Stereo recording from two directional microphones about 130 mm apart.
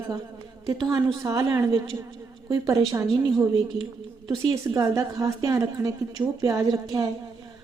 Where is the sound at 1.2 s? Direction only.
25° right (ahead or behind).